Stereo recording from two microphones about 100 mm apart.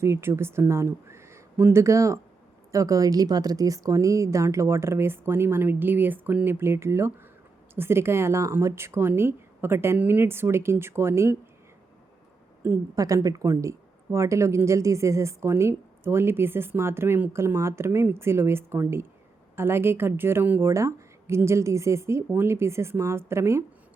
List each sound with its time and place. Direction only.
0.0 s speech: 25° right (ahead or behind)
12.6 s speech: 20° right (ahead or behind)
13.2 s speech: 35° right (ahead or behind)